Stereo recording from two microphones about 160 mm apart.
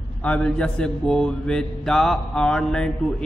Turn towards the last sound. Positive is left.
turn(degrees=5)  # may be behind; listen again after turning